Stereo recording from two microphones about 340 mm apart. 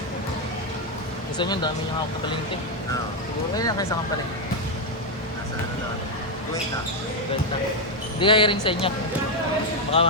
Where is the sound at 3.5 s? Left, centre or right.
Centre.